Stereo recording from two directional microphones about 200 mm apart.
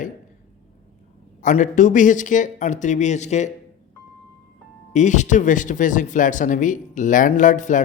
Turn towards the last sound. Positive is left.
turn(degrees=40)  # may be behind; listen again after turning